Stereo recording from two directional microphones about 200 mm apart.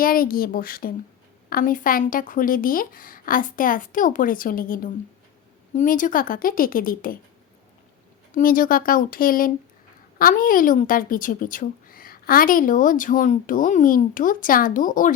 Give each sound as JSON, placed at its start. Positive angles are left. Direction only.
{"t": 0.0, "sound": "a woman's voice", "side_deg": 45}
{"t": 8.3, "sound": "a woman's voice", "side_deg": 45}